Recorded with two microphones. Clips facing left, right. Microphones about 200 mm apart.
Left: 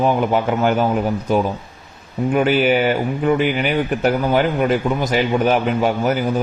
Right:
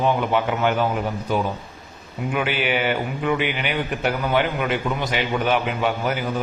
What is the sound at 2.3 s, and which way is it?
A man's voice, 40° left (ahead or behind).